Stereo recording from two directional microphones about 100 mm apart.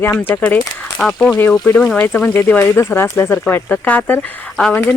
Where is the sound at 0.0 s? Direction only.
25° left (ahead or behind).